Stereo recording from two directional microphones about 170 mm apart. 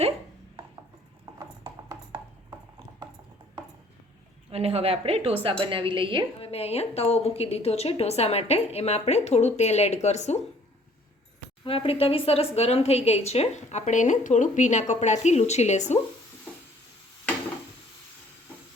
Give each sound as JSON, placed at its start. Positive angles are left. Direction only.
{"t": 1.2, "sound": "a sound", "side_deg": -20}
{"t": 4.5, "sound": "a woman's voice", "side_deg": -35}
{"t": 6.4, "sound": "a woman's voice", "side_deg": 35}
{"t": 11.6, "sound": "a woman's voice", "side_deg": 30}